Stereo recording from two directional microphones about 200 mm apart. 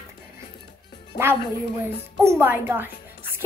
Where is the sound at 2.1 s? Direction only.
10° right (ahead or behind).